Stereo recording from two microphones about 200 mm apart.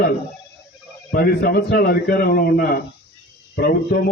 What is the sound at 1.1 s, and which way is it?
A man's voice, 50° left (ahead or behind).